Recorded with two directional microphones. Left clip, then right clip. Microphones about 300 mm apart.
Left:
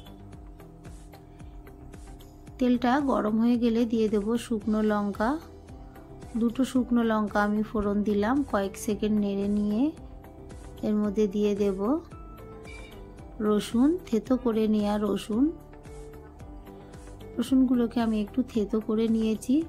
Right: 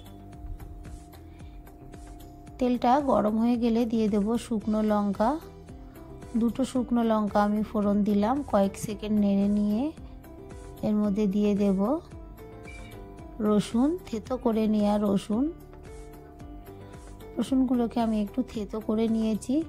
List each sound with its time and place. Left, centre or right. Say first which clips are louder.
2.6 s a woman's voice: right 2 dB; right
6.4 s a woman's voice: left 2 dB; right
13.4 s a woman's voice: left 1 dB; right
17.4 s a woman's voice: left 2 dB; right